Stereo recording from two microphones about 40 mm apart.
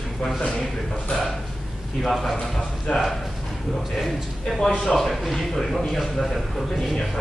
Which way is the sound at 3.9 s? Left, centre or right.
Centre.